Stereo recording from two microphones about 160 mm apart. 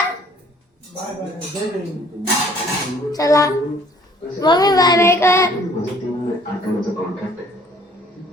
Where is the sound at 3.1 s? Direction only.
20° left (ahead or behind).